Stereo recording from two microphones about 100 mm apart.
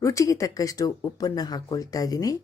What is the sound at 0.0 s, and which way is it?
Speech, 30° left (ahead or behind).